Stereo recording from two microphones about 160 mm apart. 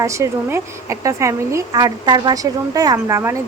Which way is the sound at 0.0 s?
20° right (ahead or behind).